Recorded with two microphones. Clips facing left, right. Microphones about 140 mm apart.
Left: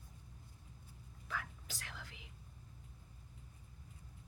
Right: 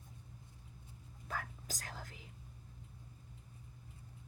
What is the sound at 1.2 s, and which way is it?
Whispering, 45° right (ahead or behind).